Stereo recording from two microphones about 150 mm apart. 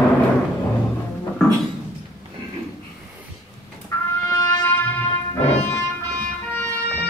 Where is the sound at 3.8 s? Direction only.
20° left (ahead or behind).